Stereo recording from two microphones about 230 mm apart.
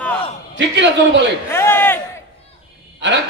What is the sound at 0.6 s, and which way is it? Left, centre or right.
Speech, right.